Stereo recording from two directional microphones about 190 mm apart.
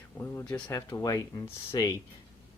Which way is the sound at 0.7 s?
15° left (ahead or behind).